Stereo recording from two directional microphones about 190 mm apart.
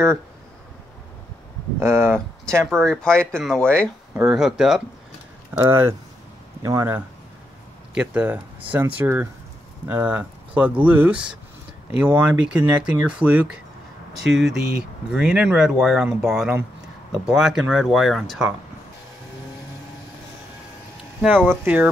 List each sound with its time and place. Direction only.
1.8 s speech: 15° right (ahead or behind)
2.6 s speech: 5° left (ahead or behind)
4.1 s speech: 5° right (ahead or behind)
5.5 s speech: 15° right (ahead or behind)
21.2 s speech: 10° right (ahead or behind)